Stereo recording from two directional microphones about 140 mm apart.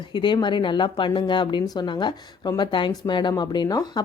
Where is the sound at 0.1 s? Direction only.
30° left (ahead or behind).